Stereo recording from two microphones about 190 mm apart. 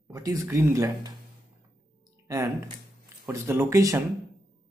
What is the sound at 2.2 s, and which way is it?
Speech, 15° right (ahead or behind).